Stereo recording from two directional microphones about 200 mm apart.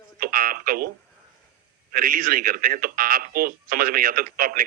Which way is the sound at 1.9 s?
45° right (ahead or behind).